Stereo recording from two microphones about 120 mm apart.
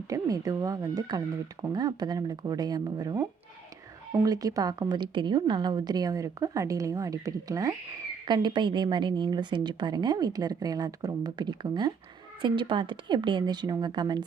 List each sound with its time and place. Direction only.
0.1 s a woman's voice: 30° right (ahead or behind)